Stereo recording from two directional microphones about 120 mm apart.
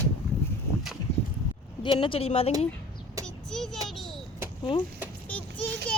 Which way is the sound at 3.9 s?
Centre (ahead or behind).